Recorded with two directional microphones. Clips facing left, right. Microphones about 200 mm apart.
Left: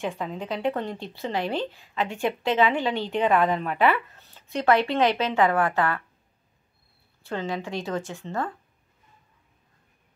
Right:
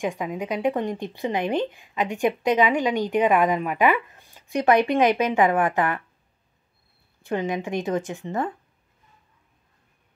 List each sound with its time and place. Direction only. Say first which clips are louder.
0.0 s speech: right 3 dB; 15° right (ahead or behind)
7.2 s speech: right 4 dB; 15° right (ahead or behind)